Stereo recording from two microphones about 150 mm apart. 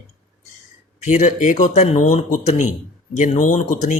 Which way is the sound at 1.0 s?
55° left (ahead or behind).